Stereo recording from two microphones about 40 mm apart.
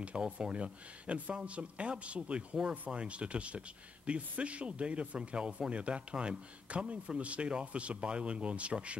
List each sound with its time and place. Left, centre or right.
0.2 s speech: right